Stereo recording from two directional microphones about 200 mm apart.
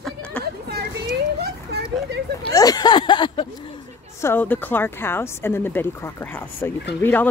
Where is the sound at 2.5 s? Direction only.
20° left (ahead or behind).